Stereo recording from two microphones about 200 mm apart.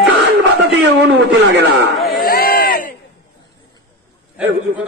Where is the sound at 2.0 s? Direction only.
Centre (ahead or behind).